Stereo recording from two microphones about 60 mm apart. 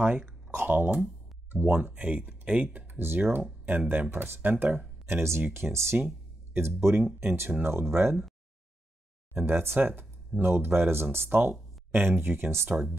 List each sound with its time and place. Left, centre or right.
0.0 s speech: right
5.0 s speech: right
9.3 s speech: right